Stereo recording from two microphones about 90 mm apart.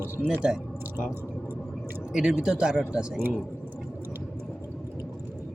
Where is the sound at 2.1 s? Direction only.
10° right (ahead or behind).